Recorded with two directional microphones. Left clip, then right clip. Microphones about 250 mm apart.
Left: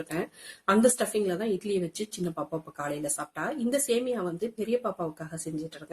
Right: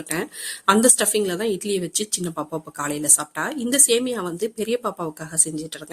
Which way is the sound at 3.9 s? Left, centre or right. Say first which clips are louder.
Right 6 dB; right.